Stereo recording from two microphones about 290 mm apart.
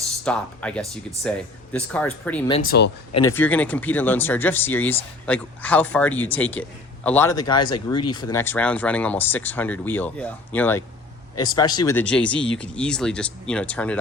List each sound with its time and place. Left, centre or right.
0.3 s speech: centre
2.6 s speech: left
3.2 s speech: centre